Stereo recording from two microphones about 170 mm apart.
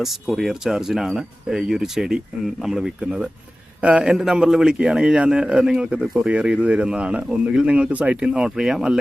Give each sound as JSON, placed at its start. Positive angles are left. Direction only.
{"t": 0.0, "sound": "a man's voice", "side_deg": 0}